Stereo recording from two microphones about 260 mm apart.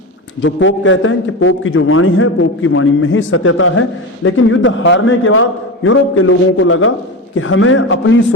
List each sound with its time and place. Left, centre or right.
0.4 s a man's voice: left